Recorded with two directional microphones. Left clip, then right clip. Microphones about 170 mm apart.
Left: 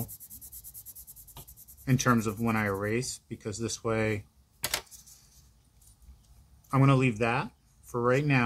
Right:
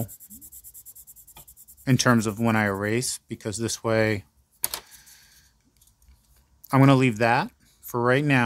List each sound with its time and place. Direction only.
1.9 s speech: 55° right (ahead or behind)
6.7 s speech: 55° right (ahead or behind)